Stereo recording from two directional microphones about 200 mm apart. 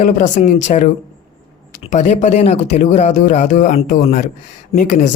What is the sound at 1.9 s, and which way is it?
Speech, 35° left (ahead or behind).